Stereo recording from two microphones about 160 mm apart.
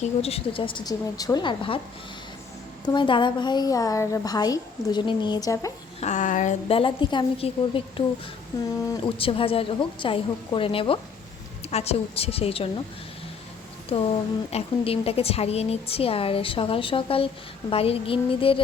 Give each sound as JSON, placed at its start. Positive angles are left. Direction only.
{"t": 0.2, "sound": "a woman's voice", "side_deg": 40}
{"t": 2.8, "sound": "a woman's voice", "side_deg": 30}
{"t": 6.0, "sound": "speech", "side_deg": 50}
{"t": 6.7, "sound": "a woman's voice", "side_deg": 35}
{"t": 8.5, "sound": "a woman's voice", "side_deg": 20}
{"t": 9.0, "sound": "a woman's voice", "side_deg": 35}
{"t": 13.9, "sound": "a woman's voice", "side_deg": 35}